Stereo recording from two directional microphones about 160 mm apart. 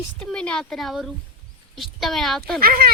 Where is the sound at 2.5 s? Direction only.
65° right (ahead or behind).